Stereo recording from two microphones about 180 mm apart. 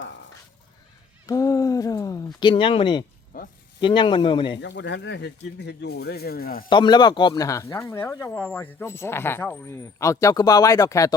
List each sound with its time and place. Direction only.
1.3 s speech: 20° left (ahead or behind)
3.3 s snake: 50° left (ahead or behind)
3.8 s speech: 25° left (ahead or behind)
4.6 s speech: 75° left (ahead or behind); by 6.7 s 55° left (ahead or behind)
6.7 s speech: 25° left (ahead or behind)